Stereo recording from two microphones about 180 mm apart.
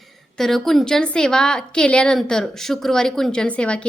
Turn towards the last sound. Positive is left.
turn(degrees=5)  # may be behind; listen again after turning